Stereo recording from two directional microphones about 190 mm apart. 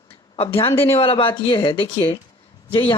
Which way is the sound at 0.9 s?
30° left (ahead or behind).